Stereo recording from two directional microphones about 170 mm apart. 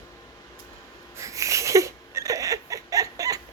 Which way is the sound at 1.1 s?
20° right (ahead or behind).